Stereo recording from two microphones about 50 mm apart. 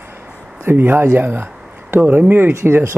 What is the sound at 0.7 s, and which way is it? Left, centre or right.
Speech, right.